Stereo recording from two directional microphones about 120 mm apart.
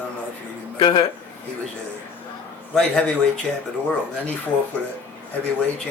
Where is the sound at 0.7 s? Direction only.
40° left (ahead or behind).